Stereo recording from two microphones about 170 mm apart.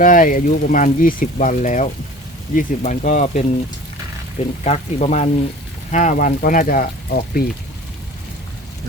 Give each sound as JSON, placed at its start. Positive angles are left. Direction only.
{"t": 0.0, "sound": "speech", "side_deg": 50}
{"t": 4.6, "sound": "speech", "side_deg": 40}